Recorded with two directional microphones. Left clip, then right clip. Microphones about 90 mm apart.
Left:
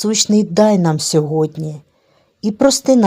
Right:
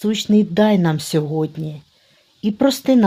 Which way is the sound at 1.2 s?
20° left (ahead or behind).